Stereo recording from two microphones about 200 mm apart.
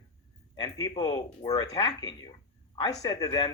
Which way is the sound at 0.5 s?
20° left (ahead or behind).